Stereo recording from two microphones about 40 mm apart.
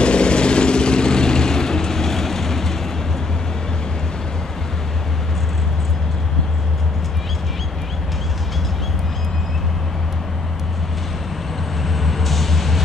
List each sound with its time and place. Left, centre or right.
0.0 s vehicle: left; by 2.7 s centre
11.8 s vehicle: centre